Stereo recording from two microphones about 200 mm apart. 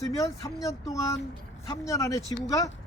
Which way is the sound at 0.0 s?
15° left (ahead or behind).